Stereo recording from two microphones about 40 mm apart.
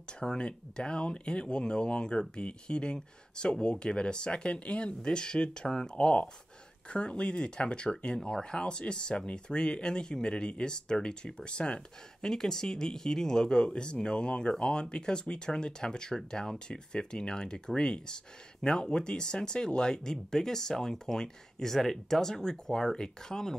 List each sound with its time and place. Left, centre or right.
0.2 s speech: centre
12.3 s speech: centre